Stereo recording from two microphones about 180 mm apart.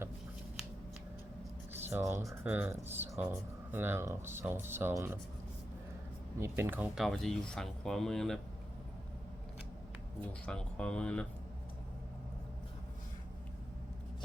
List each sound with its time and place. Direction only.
1.8 s speech: 15° right (ahead or behind)
6.4 s speech: 10° right (ahead or behind); by 8.4 s 5° left (ahead or behind)
10.2 s speech: 5° left (ahead or behind)